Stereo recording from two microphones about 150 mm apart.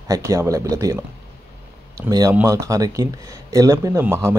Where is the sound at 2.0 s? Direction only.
25° right (ahead or behind).